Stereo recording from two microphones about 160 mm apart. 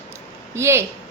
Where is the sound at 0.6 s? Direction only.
15° right (ahead or behind).